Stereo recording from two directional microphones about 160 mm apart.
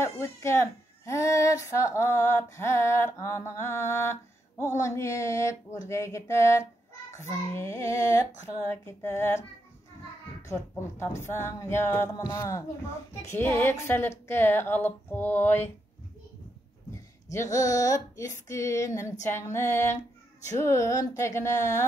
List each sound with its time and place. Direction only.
0.0 s speech: 15° left (ahead or behind)
4.7 s female singing: 20° left (ahead or behind)
8.8 s speech: 15° left (ahead or behind)
10.4 s speech: 15° left (ahead or behind)
17.3 s female singing: 20° left (ahead or behind)